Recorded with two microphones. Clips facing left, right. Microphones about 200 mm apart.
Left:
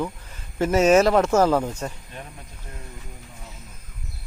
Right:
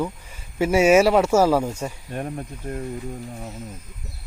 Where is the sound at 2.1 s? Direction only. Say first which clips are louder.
Right 11 dB; 55° right (ahead or behind).